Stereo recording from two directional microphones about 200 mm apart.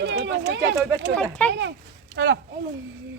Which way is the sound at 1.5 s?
65° right (ahead or behind).